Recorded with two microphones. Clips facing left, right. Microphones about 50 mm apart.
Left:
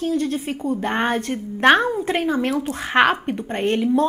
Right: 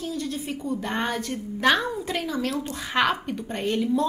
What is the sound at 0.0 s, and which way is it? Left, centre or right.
A woman's voice, left.